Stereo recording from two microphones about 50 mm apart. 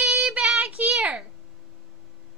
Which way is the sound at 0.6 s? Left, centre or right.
Right.